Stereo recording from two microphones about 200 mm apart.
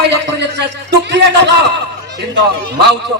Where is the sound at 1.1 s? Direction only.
60° right (ahead or behind).